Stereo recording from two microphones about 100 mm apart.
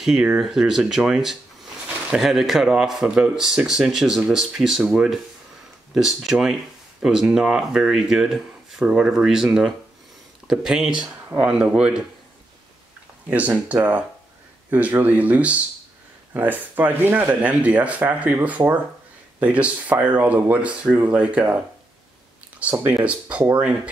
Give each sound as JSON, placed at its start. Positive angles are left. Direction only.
{"t": 0.0, "sound": "speech", "side_deg": -10}
{"t": 11.1, "sound": "speech", "side_deg": -25}
{"t": 11.4, "sound": "speech", "side_deg": -10}
{"t": 13.3, "sound": "speech", "side_deg": -15}
{"t": 22.6, "sound": "speech", "side_deg": -15}